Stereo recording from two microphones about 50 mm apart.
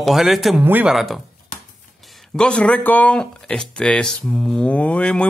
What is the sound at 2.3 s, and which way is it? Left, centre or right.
Speech, left.